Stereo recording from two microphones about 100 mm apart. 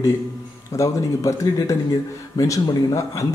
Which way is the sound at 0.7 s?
30° left (ahead or behind).